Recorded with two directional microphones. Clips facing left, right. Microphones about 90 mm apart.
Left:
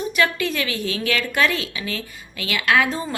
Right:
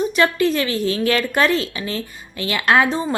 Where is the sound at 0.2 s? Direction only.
35° right (ahead or behind).